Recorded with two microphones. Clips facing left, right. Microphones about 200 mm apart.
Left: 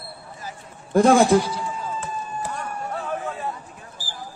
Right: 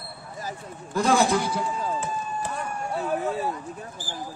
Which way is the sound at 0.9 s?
50° left (ahead or behind).